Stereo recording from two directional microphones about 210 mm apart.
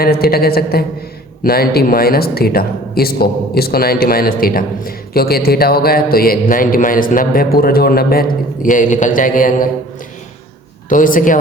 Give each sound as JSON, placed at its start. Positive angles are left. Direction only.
{"t": 0.0, "sound": "speech", "side_deg": 45}
{"t": 10.8, "sound": "a man's voice", "side_deg": 40}